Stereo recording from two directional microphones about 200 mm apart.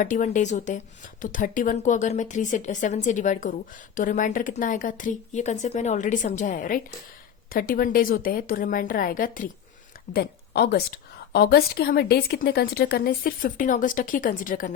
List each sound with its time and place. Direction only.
0.0 s a woman's voice: 40° left (ahead or behind)